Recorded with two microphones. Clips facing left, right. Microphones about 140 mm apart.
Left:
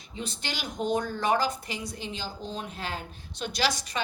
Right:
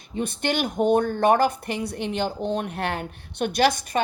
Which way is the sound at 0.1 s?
55° right (ahead or behind).